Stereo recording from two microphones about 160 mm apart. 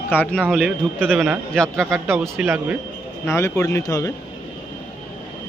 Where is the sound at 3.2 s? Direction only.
15° left (ahead or behind).